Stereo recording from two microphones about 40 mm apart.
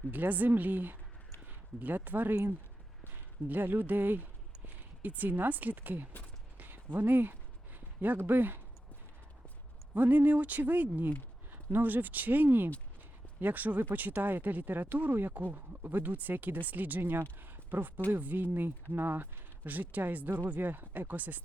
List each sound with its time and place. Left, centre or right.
0.1 s speech: right
6.6 s a sound: right
8.3 s speech: right
9.9 s speech: right
17.0 s speech: right
17.4 s a sound: right
18.2 s speech: right